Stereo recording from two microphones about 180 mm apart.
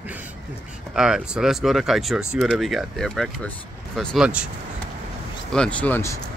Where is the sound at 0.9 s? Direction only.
5° right (ahead or behind).